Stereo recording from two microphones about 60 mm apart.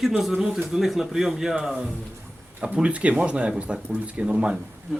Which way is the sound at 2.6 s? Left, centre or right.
Right.